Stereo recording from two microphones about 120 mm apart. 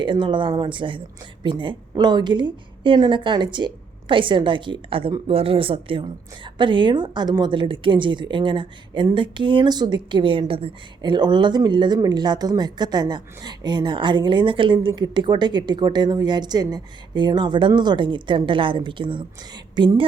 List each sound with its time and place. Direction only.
0.0 s a woman's voice: 40° right (ahead or behind)